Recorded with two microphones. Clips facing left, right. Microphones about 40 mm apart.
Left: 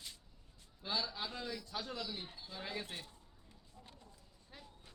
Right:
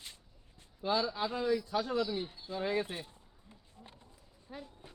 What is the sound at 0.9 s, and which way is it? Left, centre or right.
Speech, right.